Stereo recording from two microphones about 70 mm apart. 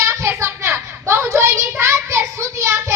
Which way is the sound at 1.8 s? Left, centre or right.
Right.